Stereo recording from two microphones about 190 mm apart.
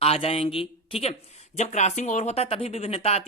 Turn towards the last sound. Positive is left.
turn(degrees=30)  # may be behind; listen again after turning